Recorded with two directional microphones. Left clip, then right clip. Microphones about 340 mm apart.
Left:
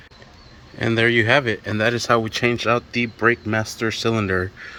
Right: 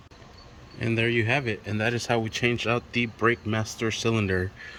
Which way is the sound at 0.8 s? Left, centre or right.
Centre.